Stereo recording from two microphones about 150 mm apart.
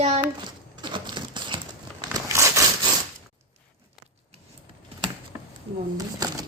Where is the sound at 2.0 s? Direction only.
20° right (ahead or behind).